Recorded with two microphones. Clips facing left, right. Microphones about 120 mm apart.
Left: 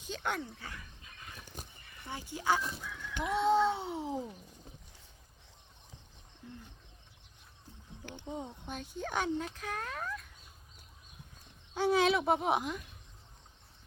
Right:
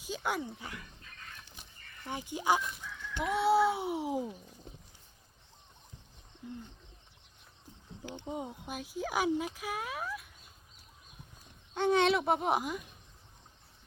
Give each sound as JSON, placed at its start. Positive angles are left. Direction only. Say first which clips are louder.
{"t": 0.0, "sound": "speech", "louder": "right 2 dB", "side_deg": -10}
{"t": 1.6, "sound": "a sound", "louder": "left 7 dB", "side_deg": 45}
{"t": 2.0, "sound": "speech", "louder": "right 2 dB", "side_deg": -15}
{"t": 2.6, "sound": "chicken", "louder": "left 1 dB", "side_deg": 30}
{"t": 3.2, "sound": "speech", "louder": "right 1 dB", "side_deg": 0}
{"t": 6.4, "sound": "speech", "louder": "right 5 dB", "side_deg": -15}
{"t": 8.1, "sound": "speech", "louder": "right 2 dB", "side_deg": -15}
{"t": 11.7, "sound": "speech", "louder": "right 1 dB", "side_deg": 5}